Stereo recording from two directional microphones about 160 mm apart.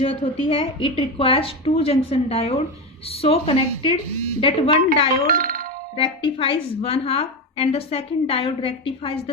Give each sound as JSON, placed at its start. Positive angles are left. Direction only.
{"t": 0.0, "sound": "a woman's voice", "side_deg": 35}
{"t": 5.2, "sound": "a child's voice", "side_deg": -65}
{"t": 6.0, "sound": "a woman's voice", "side_deg": 35}